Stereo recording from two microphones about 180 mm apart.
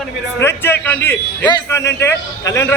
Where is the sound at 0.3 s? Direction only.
15° left (ahead or behind).